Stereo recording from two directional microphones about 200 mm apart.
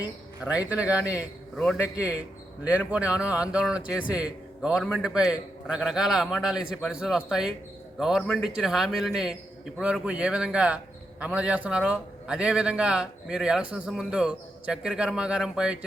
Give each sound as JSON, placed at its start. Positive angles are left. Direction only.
{"t": 0.4, "sound": "a man's voice", "side_deg": -5}